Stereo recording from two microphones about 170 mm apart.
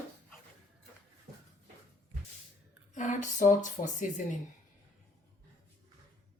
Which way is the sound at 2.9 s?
45° left (ahead or behind).